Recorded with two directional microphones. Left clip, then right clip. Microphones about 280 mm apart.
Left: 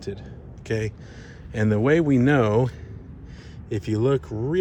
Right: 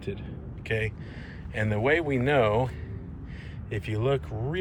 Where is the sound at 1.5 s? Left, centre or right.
Left.